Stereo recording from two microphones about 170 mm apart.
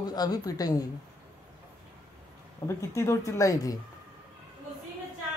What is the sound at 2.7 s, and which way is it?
A man's voice, 15° left (ahead or behind).